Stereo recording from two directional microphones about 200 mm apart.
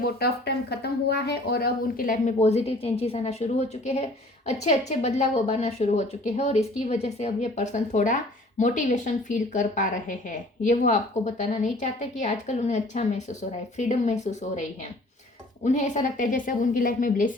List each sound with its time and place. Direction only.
0.0 s speech: 50° left (ahead or behind); by 14.6 s 35° left (ahead or behind)
15.6 s speech: 35° left (ahead or behind)